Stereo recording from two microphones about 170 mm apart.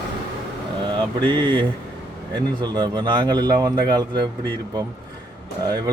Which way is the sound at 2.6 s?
25° right (ahead or behind).